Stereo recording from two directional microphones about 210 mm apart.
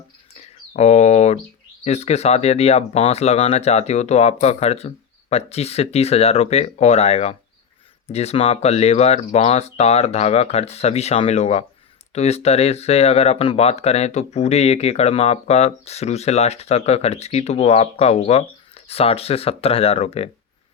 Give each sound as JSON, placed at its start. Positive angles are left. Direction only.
{"t": 0.7, "sound": "speech", "side_deg": 30}